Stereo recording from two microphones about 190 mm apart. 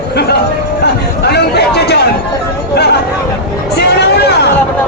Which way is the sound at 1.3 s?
60° left (ahead or behind).